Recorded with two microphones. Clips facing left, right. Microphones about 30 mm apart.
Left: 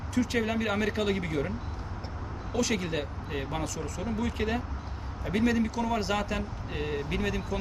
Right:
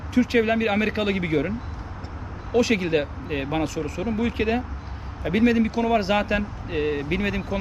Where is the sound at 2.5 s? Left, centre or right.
Right.